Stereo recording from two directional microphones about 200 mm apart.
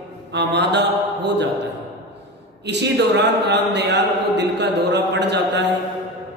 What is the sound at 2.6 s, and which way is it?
Speech, 60° right (ahead or behind).